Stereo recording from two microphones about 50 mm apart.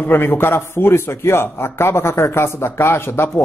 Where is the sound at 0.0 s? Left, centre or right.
Left.